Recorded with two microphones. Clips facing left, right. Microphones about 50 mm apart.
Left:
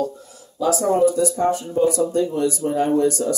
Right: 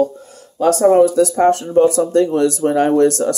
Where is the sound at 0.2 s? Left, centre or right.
Right.